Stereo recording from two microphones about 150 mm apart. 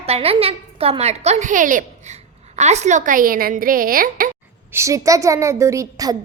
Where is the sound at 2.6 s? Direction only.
50° right (ahead or behind); by 4.3 s 75° right (ahead or behind).